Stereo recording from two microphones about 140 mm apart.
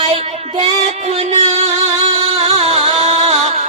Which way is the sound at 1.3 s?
50° right (ahead or behind).